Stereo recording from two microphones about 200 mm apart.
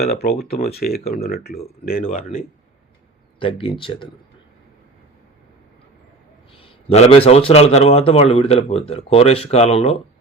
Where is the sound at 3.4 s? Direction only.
25° left (ahead or behind).